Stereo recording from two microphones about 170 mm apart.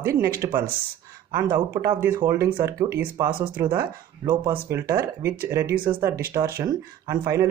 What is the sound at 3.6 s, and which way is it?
Speech, 15° right (ahead or behind).